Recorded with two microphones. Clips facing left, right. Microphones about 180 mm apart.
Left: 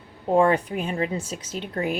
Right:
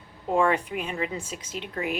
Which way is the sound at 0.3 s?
35° left (ahead or behind).